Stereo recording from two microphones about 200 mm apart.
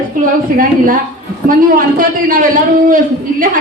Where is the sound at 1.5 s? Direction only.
45° right (ahead or behind).